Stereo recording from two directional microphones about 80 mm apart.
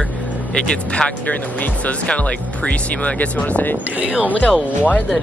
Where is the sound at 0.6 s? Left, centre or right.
Centre.